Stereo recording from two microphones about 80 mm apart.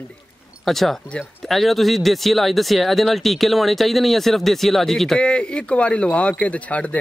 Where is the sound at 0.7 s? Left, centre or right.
Centre.